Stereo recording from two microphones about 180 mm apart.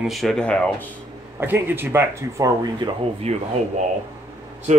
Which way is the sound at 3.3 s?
35° right (ahead or behind).